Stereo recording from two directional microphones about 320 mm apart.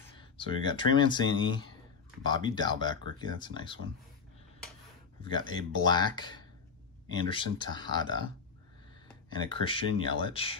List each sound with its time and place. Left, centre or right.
0.0 s speech: centre
5.2 s speech: centre
9.3 s speech: centre